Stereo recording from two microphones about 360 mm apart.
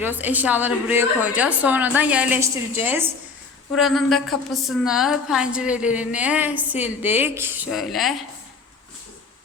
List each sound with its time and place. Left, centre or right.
0.0 s a woman's voice: centre